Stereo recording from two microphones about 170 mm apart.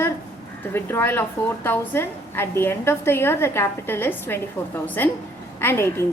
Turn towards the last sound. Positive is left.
turn(degrees=15)  # may be behind; listen again after turning